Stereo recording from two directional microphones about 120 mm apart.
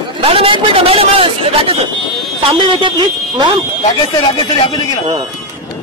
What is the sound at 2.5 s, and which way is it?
Speech, 45° right (ahead or behind).